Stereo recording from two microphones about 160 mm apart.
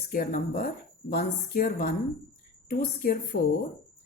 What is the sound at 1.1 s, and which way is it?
A woman's voice, 65° left (ahead or behind).